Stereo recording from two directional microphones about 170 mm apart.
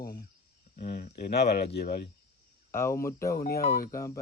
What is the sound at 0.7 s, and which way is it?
Speech, 60° left (ahead or behind).